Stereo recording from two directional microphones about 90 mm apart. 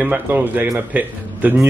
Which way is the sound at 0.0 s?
20° right (ahead or behind).